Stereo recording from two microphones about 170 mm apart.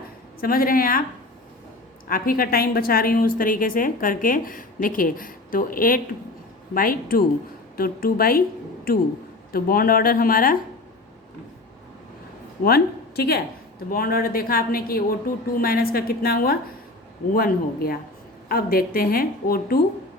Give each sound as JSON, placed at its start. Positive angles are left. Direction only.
{"t": 0.3, "sound": "a woman's voice", "side_deg": 60}
{"t": 2.0, "sound": "a woman's voice", "side_deg": 55}
{"t": 12.6, "sound": "a woman's voice", "side_deg": 65}